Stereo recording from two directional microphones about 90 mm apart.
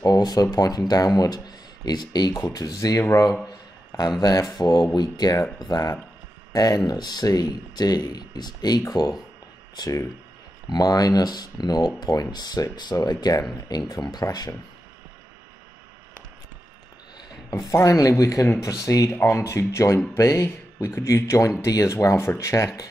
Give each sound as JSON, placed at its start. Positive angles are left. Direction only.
{"t": 0.0, "sound": "speech", "side_deg": 45}
{"t": 3.4, "sound": "a sound", "side_deg": 45}
{"t": 4.2, "sound": "speech", "side_deg": 45}
{"t": 17.6, "sound": "speech", "side_deg": 40}
{"t": 19.0, "sound": "speech", "side_deg": 25}